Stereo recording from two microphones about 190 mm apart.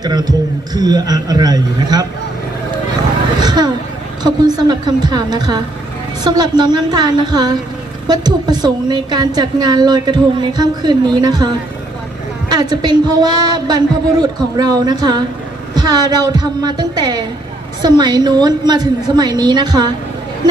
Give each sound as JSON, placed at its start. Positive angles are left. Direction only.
{"t": 0.0, "sound": "a woman's voice", "side_deg": -20}
{"t": 3.4, "sound": "vehicle", "side_deg": -20}
{"t": 4.2, "sound": "a woman's voice", "side_deg": -20}